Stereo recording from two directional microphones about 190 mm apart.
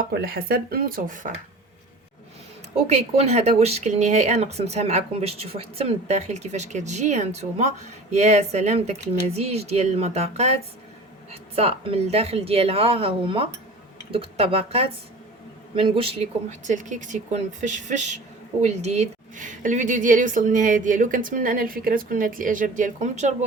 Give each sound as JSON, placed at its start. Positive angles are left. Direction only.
{"t": 0.1, "sound": "a woman's voice", "side_deg": -55}
{"t": 2.8, "sound": "a woman's voice", "side_deg": -35}